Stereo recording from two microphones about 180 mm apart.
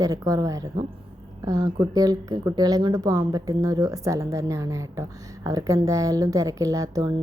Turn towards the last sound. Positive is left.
turn(degrees=-20)  # may be behind; listen again after turning